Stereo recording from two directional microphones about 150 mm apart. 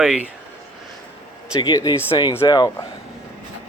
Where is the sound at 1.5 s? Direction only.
25° left (ahead or behind).